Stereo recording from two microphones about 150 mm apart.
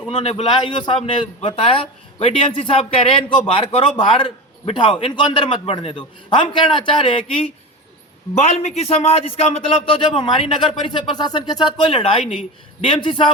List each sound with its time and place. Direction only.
0.1 s a man's voice: 40° left (ahead or behind)
8.4 s a man's voice: 45° left (ahead or behind)